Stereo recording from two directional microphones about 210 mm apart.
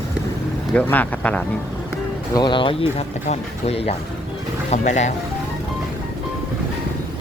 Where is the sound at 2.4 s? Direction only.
25° left (ahead or behind).